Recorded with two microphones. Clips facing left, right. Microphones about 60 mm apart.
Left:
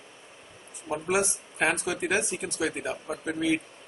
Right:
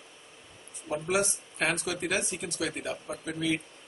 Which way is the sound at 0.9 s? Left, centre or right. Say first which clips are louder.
Left 2 dB; centre.